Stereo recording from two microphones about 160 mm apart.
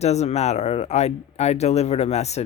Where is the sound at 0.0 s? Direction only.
45° left (ahead or behind).